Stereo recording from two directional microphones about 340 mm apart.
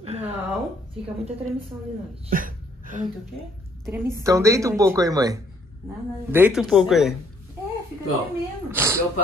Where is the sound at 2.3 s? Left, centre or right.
Right.